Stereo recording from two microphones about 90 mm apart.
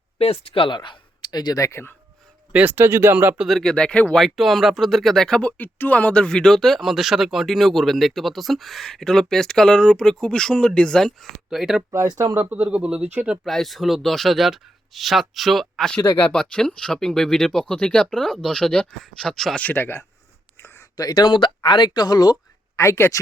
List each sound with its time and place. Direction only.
0.2 s speech: 90° left; by 1.8 s 40° left (ahead or behind)
2.5 s speech: 20° right (ahead or behind)
3.3 s speech: 5° right (ahead or behind)
3.6 s speech: 10° left (ahead or behind)
4.2 s speech: centre (ahead or behind)
12.1 s speech: 25° right (ahead or behind)
13.4 s speech: centre (ahead or behind)
19.6 s speech: 20° left (ahead or behind)
20.9 s speech: 45° left (ahead or behind)
22.7 s speech: 30° left (ahead or behind)